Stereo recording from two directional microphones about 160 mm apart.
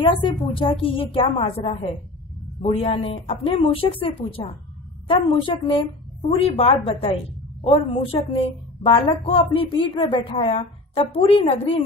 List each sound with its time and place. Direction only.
0.0 s a woman's voice: 30° left (ahead or behind)